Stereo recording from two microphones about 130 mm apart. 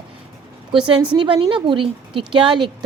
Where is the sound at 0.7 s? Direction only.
40° right (ahead or behind).